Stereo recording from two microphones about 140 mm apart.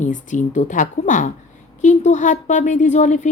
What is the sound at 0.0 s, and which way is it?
Speech, 65° left (ahead or behind).